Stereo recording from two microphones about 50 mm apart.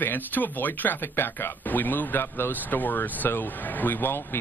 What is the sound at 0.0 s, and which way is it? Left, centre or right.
Speech, left.